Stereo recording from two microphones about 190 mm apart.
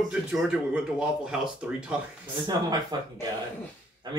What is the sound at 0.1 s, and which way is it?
Speech, 5° right (ahead or behind).